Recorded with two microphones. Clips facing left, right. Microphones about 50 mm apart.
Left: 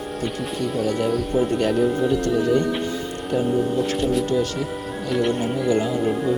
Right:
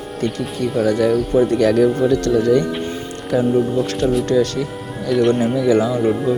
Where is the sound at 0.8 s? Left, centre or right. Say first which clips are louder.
Right 7 dB; right.